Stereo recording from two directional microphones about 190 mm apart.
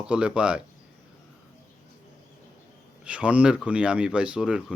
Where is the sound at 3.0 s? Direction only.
5° right (ahead or behind).